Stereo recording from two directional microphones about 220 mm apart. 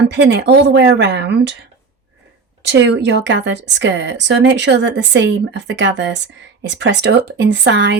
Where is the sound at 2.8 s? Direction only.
50° right (ahead or behind).